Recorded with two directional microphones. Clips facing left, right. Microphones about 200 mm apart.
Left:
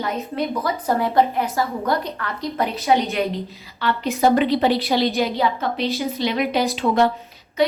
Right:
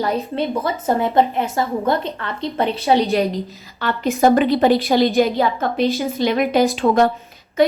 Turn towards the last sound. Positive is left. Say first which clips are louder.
# right 4 dB
turn(degrees=-50)  # may be behind; listen again after turning